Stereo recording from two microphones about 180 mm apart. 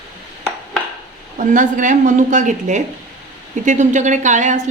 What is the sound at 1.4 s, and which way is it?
A woman's voice, 45° right (ahead or behind).